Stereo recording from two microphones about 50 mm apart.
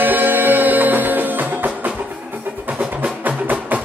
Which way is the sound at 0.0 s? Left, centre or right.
Right.